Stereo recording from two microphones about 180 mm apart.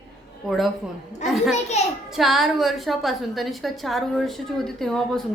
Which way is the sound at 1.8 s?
40° left (ahead or behind).